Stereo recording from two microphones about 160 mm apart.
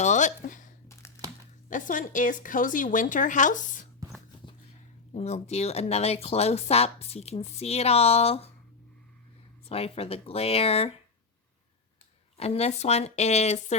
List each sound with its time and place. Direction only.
0.0 s a sound: 50° left (ahead or behind)
0.9 s crumpling: 15° left (ahead or behind)
1.7 s a woman's voice: 55° left (ahead or behind)
5.1 s speech: 45° left (ahead or behind)
9.6 s speech: 40° left (ahead or behind)
12.4 s speech: 40° left (ahead or behind)